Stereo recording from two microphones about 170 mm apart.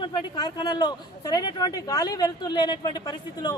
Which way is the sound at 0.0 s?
25° left (ahead or behind).